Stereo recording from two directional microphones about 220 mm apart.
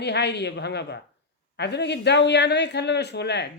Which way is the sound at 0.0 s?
50° left (ahead or behind).